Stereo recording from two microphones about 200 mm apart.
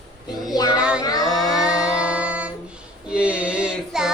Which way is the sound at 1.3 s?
Centre (ahead or behind).